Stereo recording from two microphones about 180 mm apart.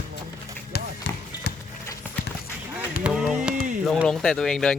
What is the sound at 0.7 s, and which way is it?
Run, 60° left (ahead or behind).